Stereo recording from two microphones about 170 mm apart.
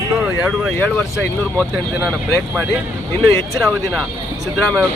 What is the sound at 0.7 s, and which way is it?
Speech, 10° left (ahead or behind).